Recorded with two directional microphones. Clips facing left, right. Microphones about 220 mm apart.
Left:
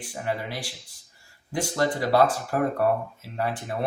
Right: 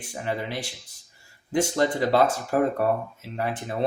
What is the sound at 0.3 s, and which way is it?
Speech, 20° right (ahead or behind).